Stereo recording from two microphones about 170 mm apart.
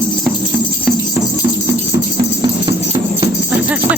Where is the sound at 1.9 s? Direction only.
20° right (ahead or behind).